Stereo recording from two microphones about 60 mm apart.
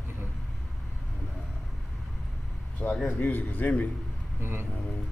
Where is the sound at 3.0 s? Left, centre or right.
Left.